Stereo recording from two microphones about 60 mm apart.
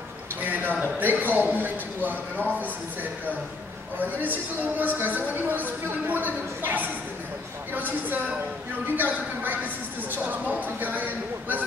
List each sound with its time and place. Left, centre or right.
0.4 s a sound: right
0.7 s a man's voice: right
4.0 s speech: right